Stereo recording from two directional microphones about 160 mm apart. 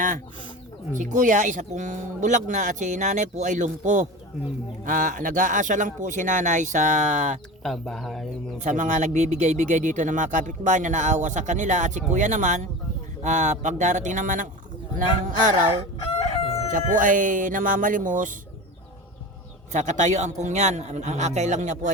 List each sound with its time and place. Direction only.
0.9 s speech: 50° right (ahead or behind)
7.6 s speech: centre (ahead or behind)
8.5 s speech: 50° right (ahead or behind)
16.1 s chicken: 40° left (ahead or behind)
16.7 s speech: 55° right (ahead or behind)
19.7 s speech: 50° right (ahead or behind)